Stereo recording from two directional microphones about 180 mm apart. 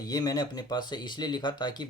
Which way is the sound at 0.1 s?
20° left (ahead or behind).